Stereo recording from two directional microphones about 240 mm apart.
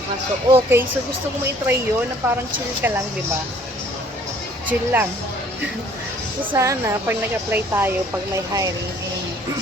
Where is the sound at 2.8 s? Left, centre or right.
Centre.